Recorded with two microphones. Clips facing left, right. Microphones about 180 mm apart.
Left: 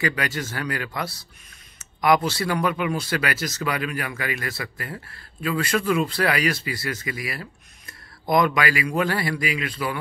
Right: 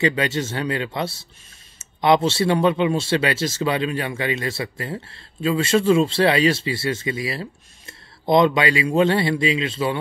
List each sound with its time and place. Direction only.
0.0 s speech: 25° right (ahead or behind)